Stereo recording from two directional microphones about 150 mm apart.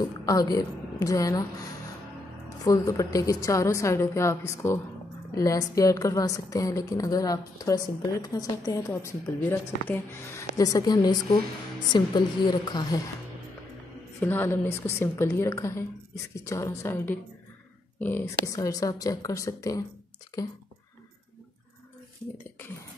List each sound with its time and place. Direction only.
0.2 s a woman's voice: 25° left (ahead or behind)
2.6 s a woman's voice: 20° left (ahead or behind)
14.2 s a woman's voice: 15° left (ahead or behind)